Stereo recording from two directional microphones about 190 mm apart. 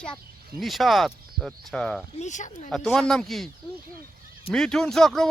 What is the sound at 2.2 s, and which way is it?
Speech, 40° left (ahead or behind).